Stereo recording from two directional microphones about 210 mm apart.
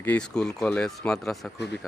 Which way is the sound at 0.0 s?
5° left (ahead or behind).